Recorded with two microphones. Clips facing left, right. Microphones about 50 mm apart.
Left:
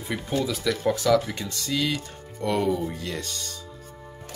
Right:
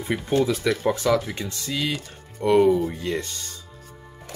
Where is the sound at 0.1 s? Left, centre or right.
Right.